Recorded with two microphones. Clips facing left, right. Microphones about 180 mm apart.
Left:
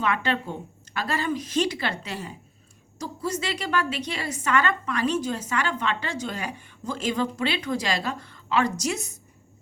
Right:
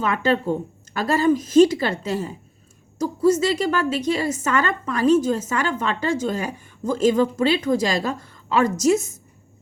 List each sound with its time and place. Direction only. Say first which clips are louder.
0.0 s a woman's voice: right 5 dB; 40° right (ahead or behind)